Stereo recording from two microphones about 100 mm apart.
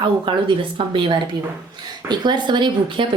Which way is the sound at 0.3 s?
55° right (ahead or behind).